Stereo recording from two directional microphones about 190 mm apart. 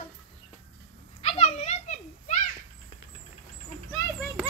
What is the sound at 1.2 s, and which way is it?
Children playing, 35° left (ahead or behind).